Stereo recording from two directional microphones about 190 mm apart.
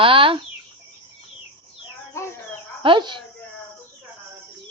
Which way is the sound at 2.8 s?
25° right (ahead or behind).